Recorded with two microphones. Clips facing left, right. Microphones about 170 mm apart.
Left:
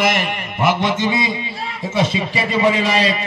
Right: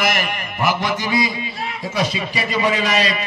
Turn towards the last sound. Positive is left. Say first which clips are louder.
# left 2 dB
turn(degrees=30)  # may be behind; listen again after turning